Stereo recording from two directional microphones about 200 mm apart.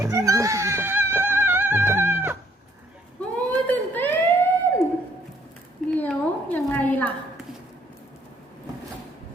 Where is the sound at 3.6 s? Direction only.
10° left (ahead or behind).